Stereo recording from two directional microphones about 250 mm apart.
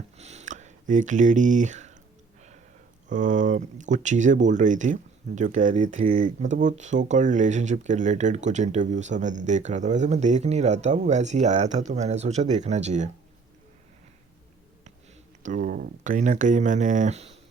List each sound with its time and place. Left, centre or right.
0.2 s a sound: right
3.1 s speech: right
15.4 s speech: right